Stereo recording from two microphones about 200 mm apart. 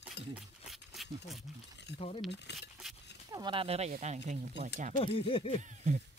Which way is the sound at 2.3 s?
60° left (ahead or behind).